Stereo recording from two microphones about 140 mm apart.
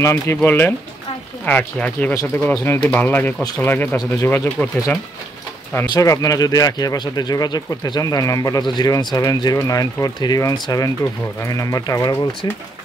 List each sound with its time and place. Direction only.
0.0 s speech: 20° left (ahead or behind)
4.6 s speech: 5° right (ahead or behind)
5.8 s speech: 25° left (ahead or behind)